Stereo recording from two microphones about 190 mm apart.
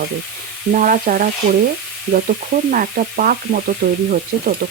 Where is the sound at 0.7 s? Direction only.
45° right (ahead or behind).